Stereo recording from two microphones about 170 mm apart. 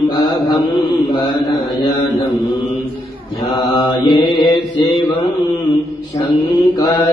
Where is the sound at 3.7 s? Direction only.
25° left (ahead or behind).